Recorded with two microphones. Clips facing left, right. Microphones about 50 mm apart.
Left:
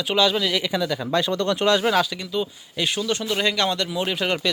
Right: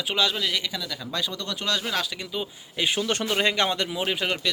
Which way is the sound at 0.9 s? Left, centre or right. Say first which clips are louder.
Left 8 dB; left.